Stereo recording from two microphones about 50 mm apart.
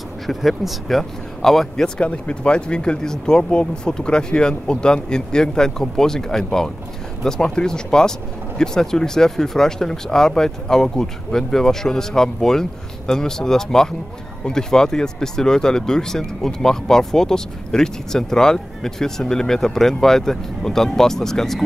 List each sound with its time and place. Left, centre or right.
0.3 s speech: centre
2.0 s speech: left; by 21.6 s centre